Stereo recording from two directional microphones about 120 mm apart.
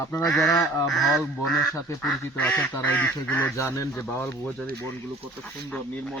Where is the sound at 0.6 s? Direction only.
Centre (ahead or behind).